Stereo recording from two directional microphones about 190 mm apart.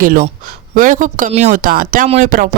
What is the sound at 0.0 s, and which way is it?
A woman's voice, 45° right (ahead or behind).